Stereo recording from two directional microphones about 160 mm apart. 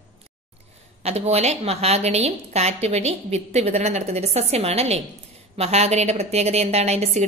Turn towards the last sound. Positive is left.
turn(degrees=-45)  # may be behind; listen again after turning